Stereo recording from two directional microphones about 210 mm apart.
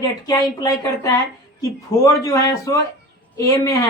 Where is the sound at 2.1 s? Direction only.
15° left (ahead or behind).